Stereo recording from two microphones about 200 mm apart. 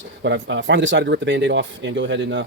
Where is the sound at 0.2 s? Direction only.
60° right (ahead or behind).